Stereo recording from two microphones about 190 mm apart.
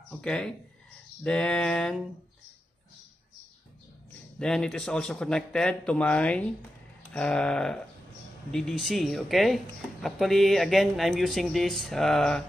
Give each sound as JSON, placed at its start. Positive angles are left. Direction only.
{"t": 0.2, "sound": "speech", "side_deg": 5}
{"t": 4.4, "sound": "speech", "side_deg": 5}